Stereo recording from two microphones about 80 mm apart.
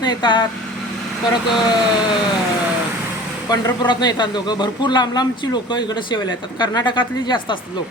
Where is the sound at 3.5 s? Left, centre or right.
Left.